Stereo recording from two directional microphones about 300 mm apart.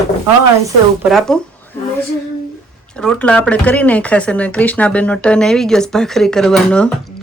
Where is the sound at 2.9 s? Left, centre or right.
Centre.